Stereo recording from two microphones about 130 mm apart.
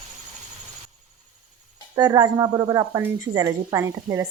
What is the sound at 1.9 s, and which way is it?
A woman's voice, 30° right (ahead or behind).